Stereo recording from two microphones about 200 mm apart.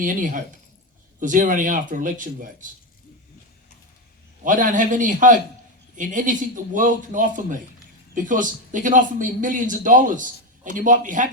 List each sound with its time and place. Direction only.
0.0 s speech: 40° right (ahead or behind)
4.4 s speech: 40° right (ahead or behind)